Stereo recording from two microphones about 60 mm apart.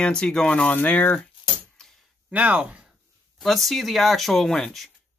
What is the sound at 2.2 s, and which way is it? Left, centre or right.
Speech, right.